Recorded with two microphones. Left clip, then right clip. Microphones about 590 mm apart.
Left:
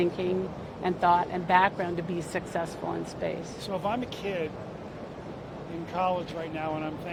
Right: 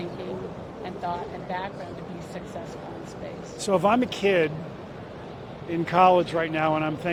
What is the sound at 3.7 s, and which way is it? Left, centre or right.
Speech, right.